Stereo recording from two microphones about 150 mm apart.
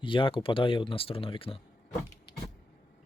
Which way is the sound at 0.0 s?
35° left (ahead or behind).